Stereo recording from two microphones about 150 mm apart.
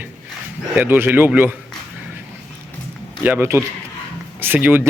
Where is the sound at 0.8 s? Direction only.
15° right (ahead or behind).